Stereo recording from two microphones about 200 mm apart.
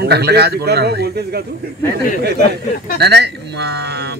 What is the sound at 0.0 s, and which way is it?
Speech, 55° right (ahead or behind).